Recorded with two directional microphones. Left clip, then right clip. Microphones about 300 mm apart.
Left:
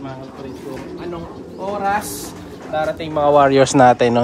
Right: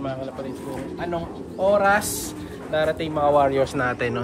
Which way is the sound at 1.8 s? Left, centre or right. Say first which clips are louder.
Even; centre.